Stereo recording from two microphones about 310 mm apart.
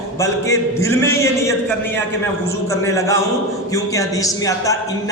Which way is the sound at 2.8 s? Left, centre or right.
Centre.